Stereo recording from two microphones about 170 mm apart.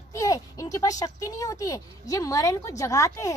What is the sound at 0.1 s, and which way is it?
A woman's voice, 20° left (ahead or behind).